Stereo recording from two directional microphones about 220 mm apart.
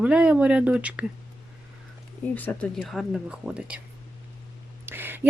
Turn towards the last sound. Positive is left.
turn(degrees=-10)  # may be behind; listen again after turning